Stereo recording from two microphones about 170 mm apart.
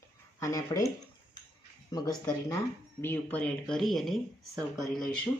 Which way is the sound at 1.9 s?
20° left (ahead or behind).